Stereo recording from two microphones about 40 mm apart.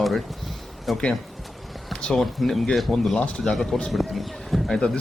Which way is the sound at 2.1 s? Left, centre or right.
Centre.